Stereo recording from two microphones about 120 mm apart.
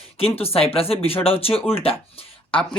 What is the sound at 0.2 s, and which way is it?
Speech, 55° left (ahead or behind).